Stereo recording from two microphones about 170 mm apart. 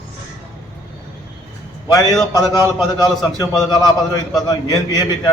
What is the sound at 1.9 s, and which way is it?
Speech, 20° left (ahead or behind).